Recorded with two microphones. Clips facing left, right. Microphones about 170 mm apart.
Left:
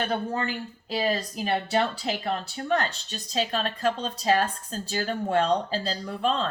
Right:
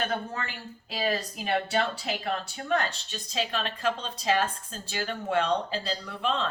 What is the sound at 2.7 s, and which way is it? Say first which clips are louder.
A woman's voice: left 1 dB; 40° left (ahead or behind).